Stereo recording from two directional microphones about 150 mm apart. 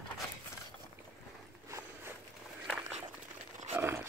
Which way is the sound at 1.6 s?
20° right (ahead or behind).